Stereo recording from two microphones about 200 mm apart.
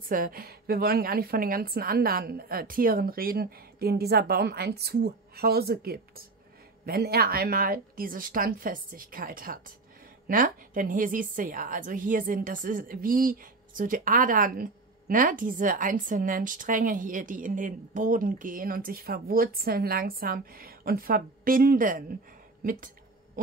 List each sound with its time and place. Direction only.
0.1 s a woman's voice: 45° right (ahead or behind)
23.4 s heart sounds: 40° right (ahead or behind)